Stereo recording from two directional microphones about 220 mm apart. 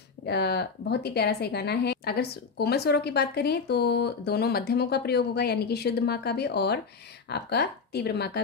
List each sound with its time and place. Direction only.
0.2 s a woman's voice: 50° left (ahead or behind)